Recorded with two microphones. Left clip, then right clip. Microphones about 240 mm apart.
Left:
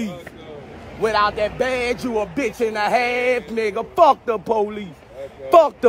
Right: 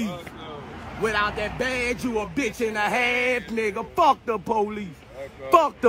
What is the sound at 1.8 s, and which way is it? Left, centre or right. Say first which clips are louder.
Speech: left 4 dB; centre.